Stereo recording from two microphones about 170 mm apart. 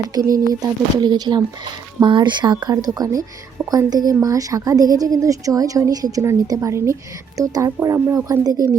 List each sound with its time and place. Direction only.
0.1 s a woman's voice: 20° right (ahead or behind)